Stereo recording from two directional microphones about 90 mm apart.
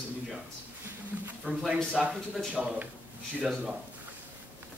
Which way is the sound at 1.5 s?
20° right (ahead or behind).